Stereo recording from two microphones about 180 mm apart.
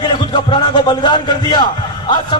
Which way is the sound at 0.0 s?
25° left (ahead or behind).